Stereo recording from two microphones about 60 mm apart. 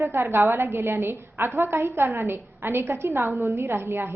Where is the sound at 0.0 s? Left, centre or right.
Right.